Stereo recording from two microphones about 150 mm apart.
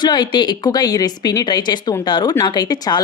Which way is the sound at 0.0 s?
30° left (ahead or behind).